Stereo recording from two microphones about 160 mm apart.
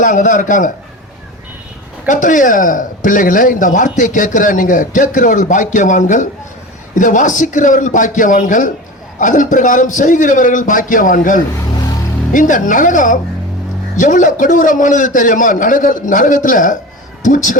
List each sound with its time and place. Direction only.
0.0 s a man's voice: 50° left (ahead or behind)
2.0 s a man's voice: 55° left (ahead or behind)